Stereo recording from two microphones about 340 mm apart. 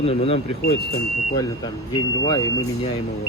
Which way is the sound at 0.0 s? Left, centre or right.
Centre.